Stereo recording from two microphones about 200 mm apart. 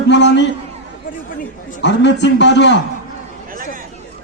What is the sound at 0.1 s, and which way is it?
Speech, 60° left (ahead or behind).